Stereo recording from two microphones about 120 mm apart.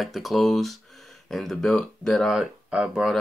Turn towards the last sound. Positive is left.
turn(degrees=-5)  # may be behind; listen again after turning